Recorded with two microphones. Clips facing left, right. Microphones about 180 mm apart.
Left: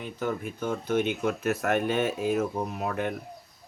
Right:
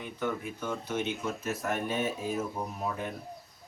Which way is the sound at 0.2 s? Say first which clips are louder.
Left 3 dB; 50° left (ahead or behind).